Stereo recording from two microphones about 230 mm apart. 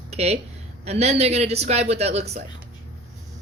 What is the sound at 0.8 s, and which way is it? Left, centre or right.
A woman's voice, right.